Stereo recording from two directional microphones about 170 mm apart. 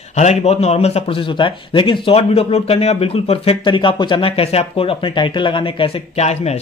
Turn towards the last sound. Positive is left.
turn(degrees=40)  # may be behind; listen again after turning